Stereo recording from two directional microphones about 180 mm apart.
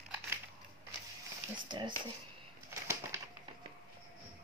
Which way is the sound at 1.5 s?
25° right (ahead or behind).